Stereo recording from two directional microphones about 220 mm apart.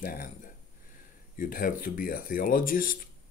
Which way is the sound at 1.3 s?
40° left (ahead or behind).